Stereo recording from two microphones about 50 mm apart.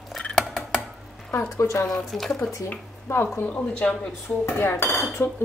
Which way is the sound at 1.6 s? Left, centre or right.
Left.